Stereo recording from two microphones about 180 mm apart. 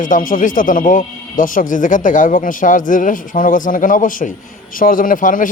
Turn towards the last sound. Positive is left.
turn(degrees=45)  # may be behind; listen again after turning